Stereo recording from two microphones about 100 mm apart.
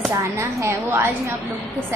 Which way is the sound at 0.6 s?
25° right (ahead or behind).